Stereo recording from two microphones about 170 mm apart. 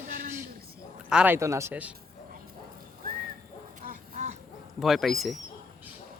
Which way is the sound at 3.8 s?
50° right (ahead or behind).